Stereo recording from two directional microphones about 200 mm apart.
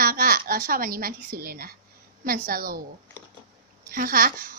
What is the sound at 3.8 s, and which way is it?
Speech, 45° right (ahead or behind).